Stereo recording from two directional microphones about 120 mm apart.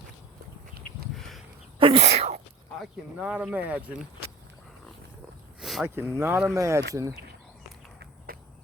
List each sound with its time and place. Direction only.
1.8 s sneeze: 50° right (ahead or behind)
2.0 s sneeze: 65° right (ahead or behind)
3.2 s speech: 10° right (ahead or behind)
5.5 s a sound: centre (ahead or behind)
5.8 s speech: 20° right (ahead or behind)